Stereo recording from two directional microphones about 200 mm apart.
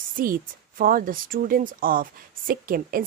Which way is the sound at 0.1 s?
45° right (ahead or behind).